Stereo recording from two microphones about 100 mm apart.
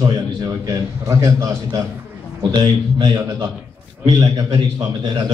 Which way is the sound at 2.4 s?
45° right (ahead or behind).